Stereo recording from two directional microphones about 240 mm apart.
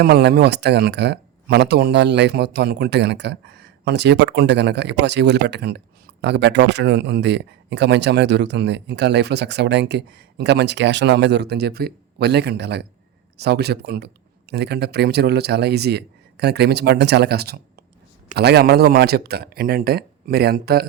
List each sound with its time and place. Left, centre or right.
0.0 s speech: right